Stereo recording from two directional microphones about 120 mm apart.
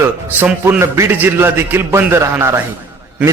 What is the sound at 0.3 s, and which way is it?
A man's voice, 15° right (ahead or behind).